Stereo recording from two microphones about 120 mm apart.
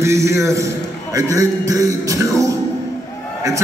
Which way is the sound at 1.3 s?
30° right (ahead or behind).